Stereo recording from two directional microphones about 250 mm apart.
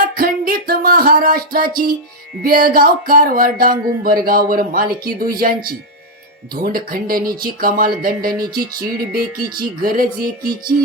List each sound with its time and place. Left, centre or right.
0.2 s music: right
2.4 s speech: right